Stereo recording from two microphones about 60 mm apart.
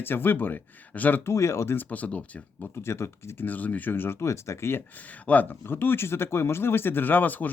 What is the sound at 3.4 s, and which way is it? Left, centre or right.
Speech, left.